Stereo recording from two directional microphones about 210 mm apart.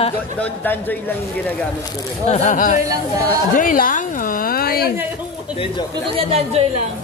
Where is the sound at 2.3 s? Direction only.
35° left (ahead or behind).